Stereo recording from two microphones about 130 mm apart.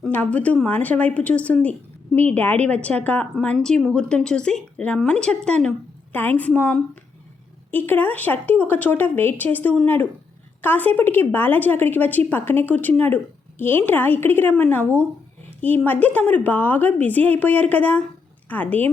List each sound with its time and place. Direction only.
0.0 s a woman's voice: 10° left (ahead or behind)